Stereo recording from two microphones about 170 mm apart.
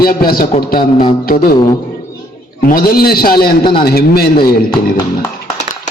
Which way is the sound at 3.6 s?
30° left (ahead or behind).